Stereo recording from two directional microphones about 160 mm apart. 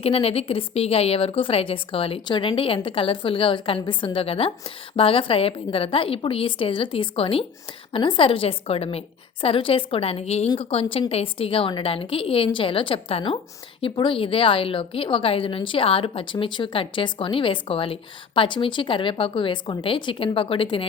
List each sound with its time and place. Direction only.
0.0 s a woman's voice: 40° left (ahead or behind)